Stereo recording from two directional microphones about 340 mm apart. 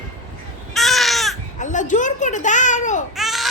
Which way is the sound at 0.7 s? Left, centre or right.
Centre.